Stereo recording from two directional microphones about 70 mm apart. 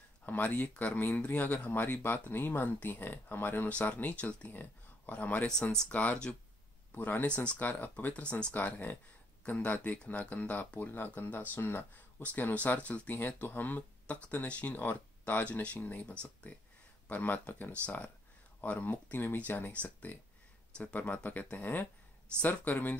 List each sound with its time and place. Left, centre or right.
0.2 s speech: left
5.5 s speech: centre
5.9 s speech: left
8.1 s speech: centre